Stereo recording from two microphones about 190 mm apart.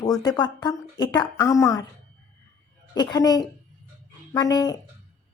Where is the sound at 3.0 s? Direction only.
20° left (ahead or behind).